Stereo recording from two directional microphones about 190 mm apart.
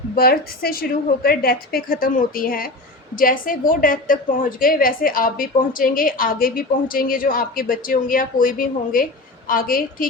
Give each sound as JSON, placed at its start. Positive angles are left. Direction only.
{"t": 0.2, "sound": "a woman's voice", "side_deg": 50}